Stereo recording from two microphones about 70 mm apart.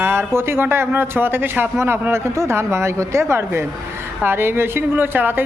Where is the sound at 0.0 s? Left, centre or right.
Right.